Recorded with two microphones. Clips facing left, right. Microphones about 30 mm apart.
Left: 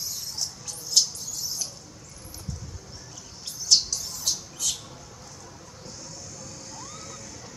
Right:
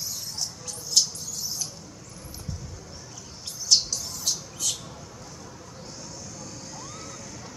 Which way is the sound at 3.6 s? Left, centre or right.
Centre.